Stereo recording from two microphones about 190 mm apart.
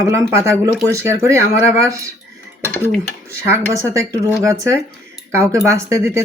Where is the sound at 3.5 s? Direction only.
15° right (ahead or behind).